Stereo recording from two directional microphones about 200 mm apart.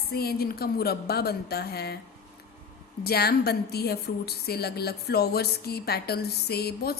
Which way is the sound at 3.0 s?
50° left (ahead or behind).